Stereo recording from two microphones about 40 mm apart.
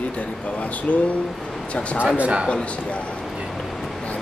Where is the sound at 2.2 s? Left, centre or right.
Right.